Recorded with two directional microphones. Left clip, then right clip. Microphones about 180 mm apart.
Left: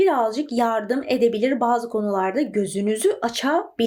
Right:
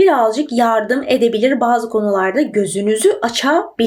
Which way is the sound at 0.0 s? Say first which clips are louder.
Right 7 dB; 15° left (ahead or behind).